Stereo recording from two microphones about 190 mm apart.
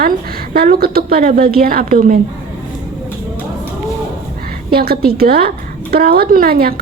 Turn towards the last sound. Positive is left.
turn(degrees=-55)  # may be behind; listen again after turning